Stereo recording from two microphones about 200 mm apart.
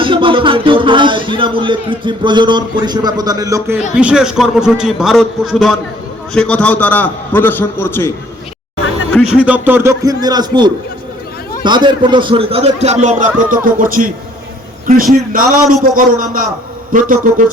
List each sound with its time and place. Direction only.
0.0 s music: 25° right (ahead or behind)
3.9 s a man's voice: 5° right (ahead or behind); by 8.1 s 10° left (ahead or behind)
9.5 s a man's voice: 10° right (ahead or behind)
11.6 s music: 20° right (ahead or behind); by 13.6 s 40° right (ahead or behind)
13.7 s a man's voice: 45° right (ahead or behind)
15.3 s a man's voice: 45° right (ahead or behind)